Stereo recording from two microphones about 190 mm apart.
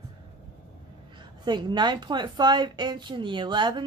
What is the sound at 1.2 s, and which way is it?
A woman's voice, 25° right (ahead or behind).